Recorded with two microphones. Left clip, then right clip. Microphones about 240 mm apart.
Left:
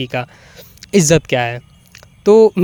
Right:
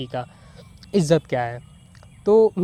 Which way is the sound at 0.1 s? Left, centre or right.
Left.